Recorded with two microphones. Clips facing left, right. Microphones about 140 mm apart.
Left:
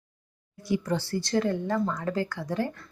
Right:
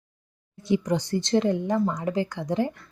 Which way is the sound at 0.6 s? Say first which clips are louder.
Right 4 dB; 20° right (ahead or behind).